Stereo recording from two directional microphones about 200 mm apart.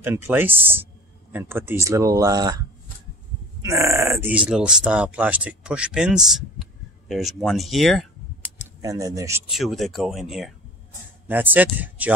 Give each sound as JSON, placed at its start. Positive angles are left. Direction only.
{"t": 0.0, "sound": "speech", "side_deg": -10}
{"t": 3.6, "sound": "speech", "side_deg": -15}
{"t": 8.8, "sound": "speech", "side_deg": -15}
{"t": 9.5, "sound": "speech", "side_deg": 0}